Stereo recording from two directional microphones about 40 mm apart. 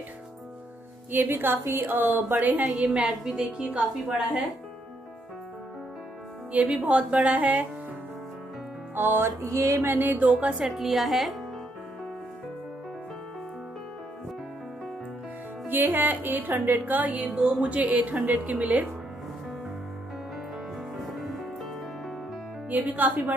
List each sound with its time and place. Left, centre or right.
1.1 s music: right
2.7 s a woman's voice: right
6.5 s speech: right
8.9 s music: right
10.7 s a woman's voice: centre
15.7 s speech: right
20.9 s music: centre
22.7 s speech: right